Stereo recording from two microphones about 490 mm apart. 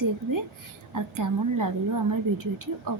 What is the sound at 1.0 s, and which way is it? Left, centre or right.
Speech, right.